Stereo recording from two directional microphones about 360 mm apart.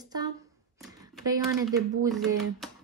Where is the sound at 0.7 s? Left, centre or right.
Centre.